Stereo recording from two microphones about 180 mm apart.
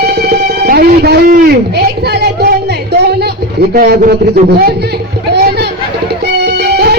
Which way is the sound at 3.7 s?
60° right (ahead or behind).